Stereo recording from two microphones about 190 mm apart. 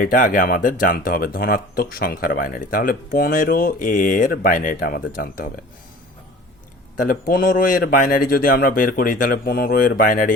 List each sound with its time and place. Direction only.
0.0 s speech: 45° left (ahead or behind)
7.0 s speech: 50° left (ahead or behind)